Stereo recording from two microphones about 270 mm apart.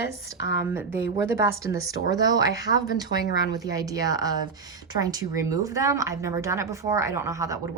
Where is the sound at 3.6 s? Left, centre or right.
Centre.